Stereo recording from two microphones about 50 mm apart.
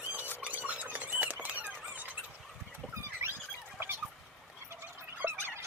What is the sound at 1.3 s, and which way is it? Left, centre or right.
Squeal, right.